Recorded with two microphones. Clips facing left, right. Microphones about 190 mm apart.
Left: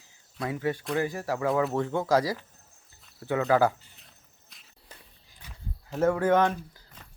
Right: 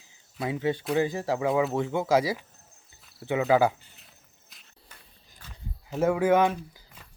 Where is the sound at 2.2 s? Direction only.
20° right (ahead or behind).